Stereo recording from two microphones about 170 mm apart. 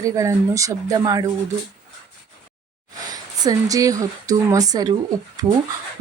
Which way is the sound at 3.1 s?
20° right (ahead or behind).